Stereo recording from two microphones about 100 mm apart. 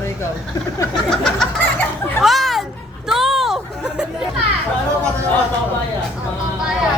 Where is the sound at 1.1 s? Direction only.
5° left (ahead or behind).